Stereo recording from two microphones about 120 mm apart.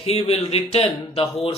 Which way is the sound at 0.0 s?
55° left (ahead or behind).